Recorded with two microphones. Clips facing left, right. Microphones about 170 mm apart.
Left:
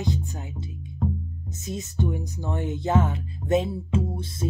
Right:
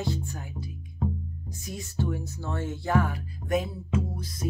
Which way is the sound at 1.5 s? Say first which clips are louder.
Left 6 dB; 20° left (ahead or behind).